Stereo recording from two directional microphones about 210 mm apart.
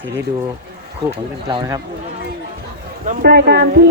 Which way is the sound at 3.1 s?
45° right (ahead or behind).